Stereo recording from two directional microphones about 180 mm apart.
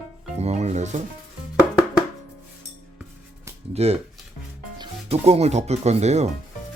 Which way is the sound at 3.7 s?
35° right (ahead or behind).